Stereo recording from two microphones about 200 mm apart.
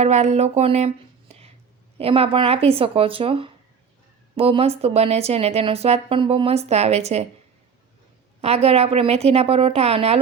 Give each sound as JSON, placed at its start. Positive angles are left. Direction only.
{"t": 0.0, "sound": "speech", "side_deg": -35}
{"t": 2.0, "sound": "speech", "side_deg": -30}
{"t": 8.4, "sound": "speech", "side_deg": -30}